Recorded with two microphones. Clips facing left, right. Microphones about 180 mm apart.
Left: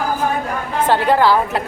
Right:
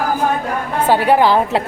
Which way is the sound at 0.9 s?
10° right (ahead or behind).